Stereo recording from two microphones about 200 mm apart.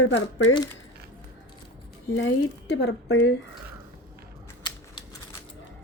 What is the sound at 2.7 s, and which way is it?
Speech, 70° left (ahead or behind).